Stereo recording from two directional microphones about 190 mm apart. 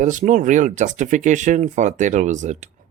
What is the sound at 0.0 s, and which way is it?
Speech, 40° right (ahead or behind).